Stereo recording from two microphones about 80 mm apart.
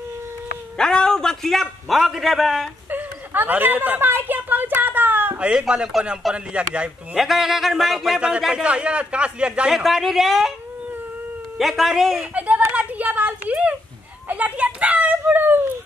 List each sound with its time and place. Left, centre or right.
0.7 s a man's voice: centre
2.9 s a sound: right
5.4 s a man's voice: centre
7.2 s a man's voice: centre
11.5 s speech: centre
12.4 s a sound: centre
14.3 s a child's voice: centre